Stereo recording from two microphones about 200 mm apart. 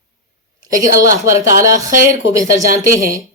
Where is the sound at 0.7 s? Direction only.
45° right (ahead or behind).